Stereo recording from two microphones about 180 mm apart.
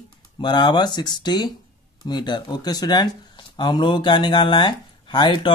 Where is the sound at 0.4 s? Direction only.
25° left (ahead or behind).